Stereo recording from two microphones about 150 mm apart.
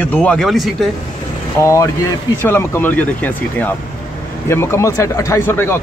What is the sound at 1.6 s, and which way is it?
Speech, 20° left (ahead or behind).